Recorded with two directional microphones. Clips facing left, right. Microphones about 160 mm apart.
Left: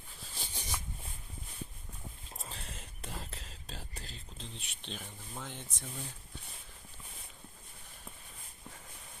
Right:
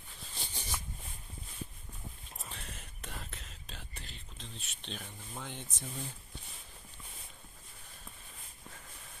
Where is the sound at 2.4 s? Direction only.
30° left (ahead or behind).